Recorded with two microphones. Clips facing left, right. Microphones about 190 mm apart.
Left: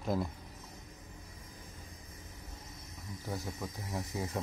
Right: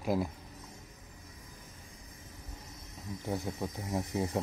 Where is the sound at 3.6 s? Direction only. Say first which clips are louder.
Right 5 dB; 25° right (ahead or behind).